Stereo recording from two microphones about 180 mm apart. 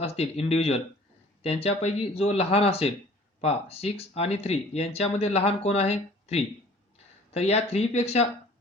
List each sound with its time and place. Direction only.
0.0 s speech: 35° left (ahead or behind)